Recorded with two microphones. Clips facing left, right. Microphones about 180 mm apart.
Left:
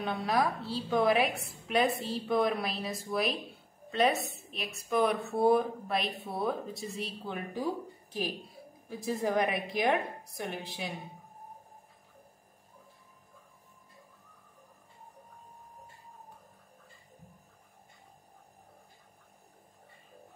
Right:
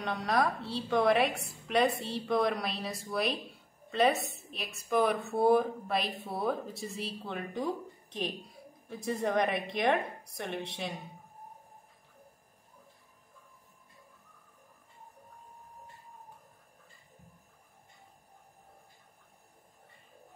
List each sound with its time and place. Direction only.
0.0 s a woman's voice: 5° left (ahead or behind)